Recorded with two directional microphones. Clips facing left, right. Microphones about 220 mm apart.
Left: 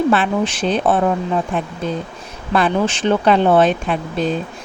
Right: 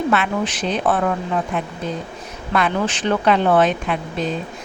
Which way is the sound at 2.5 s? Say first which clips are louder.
Left 3 dB; 30° left (ahead or behind).